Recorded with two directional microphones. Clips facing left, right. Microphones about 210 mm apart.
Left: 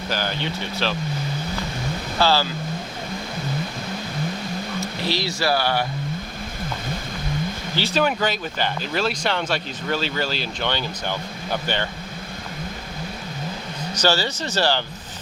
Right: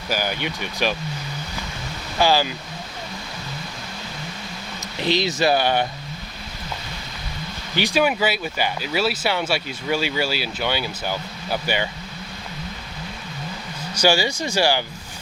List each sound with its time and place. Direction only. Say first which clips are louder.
0.1 s speech: right 2 dB; 10° right (ahead or behind)
2.1 s speech: right 1 dB; 15° right (ahead or behind)
4.8 s speech: right 5 dB; 20° right (ahead or behind)
7.8 s speech: right 2 dB; 10° right (ahead or behind)
13.9 s speech: right 2 dB; 10° right (ahead or behind)